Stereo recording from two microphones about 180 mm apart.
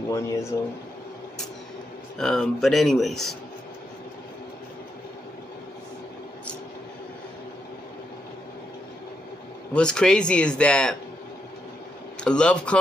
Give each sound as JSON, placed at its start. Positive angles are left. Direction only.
{"t": 0.1, "sound": "speech", "side_deg": 15}
{"t": 2.1, "sound": "speech", "side_deg": 5}
{"t": 9.8, "sound": "speech", "side_deg": 5}
{"t": 12.2, "sound": "speech", "side_deg": 5}